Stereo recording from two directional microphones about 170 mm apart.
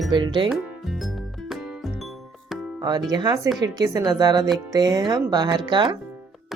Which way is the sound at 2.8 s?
25° right (ahead or behind).